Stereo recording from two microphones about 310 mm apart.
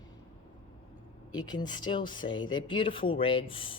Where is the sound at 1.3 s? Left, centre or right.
Centre.